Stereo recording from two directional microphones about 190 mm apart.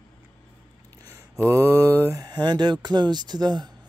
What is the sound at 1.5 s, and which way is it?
Speech, 15° right (ahead or behind).